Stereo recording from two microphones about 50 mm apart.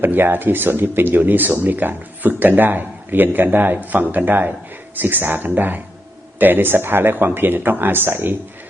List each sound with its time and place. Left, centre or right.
0.0 s speech: right